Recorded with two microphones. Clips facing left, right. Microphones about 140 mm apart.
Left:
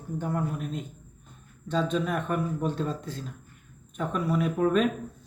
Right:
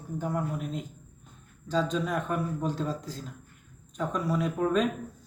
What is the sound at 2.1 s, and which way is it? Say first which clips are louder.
Speech: left 1 dB; centre (ahead or behind).